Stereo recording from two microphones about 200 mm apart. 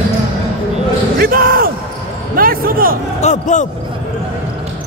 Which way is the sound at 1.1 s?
45° right (ahead or behind).